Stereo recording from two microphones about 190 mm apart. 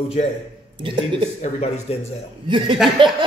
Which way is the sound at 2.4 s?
25° right (ahead or behind).